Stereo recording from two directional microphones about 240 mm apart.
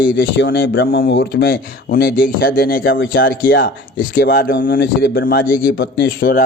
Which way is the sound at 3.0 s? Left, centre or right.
Left.